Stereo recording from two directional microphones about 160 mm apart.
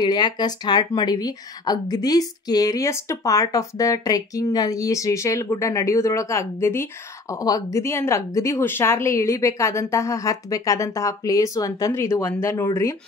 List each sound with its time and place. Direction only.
0.0 s speech: 25° left (ahead or behind)